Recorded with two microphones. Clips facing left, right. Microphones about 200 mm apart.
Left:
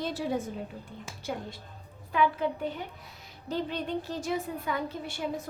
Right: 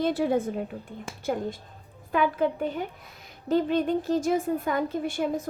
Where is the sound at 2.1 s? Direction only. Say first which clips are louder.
Right 2 dB; 50° right (ahead or behind).